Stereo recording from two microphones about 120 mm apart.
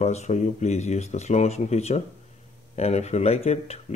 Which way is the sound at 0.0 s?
70° left (ahead or behind).